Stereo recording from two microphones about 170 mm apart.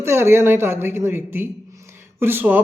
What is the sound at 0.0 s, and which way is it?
A man's voice, 15° right (ahead or behind).